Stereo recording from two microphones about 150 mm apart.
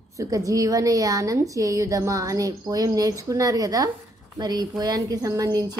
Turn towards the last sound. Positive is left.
turn(degrees=-25)  # may be behind; listen again after turning